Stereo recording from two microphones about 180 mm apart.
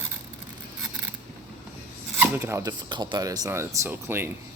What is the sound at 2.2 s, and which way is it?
Speech, 15° right (ahead or behind).